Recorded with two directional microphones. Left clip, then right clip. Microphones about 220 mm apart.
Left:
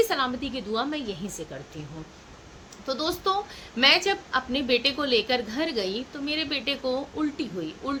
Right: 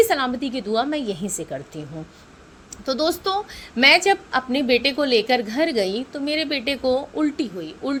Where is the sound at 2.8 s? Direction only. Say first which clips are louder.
Right 5 dB; 30° right (ahead or behind).